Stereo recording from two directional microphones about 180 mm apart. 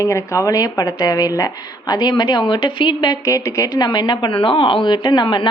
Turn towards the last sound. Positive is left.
turn(degrees=25)  # may be behind; listen again after turning